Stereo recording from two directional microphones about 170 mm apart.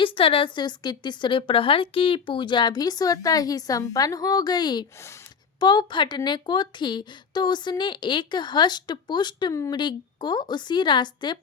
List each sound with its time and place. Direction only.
0.0 s speech: 35° left (ahead or behind)